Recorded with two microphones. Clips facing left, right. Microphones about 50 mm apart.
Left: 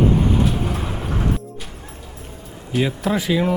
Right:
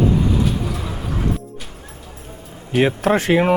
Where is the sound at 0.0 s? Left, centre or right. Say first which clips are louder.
Even; left.